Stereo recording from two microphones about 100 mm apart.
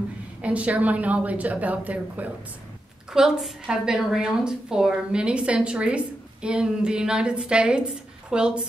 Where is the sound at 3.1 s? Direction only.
5° right (ahead or behind).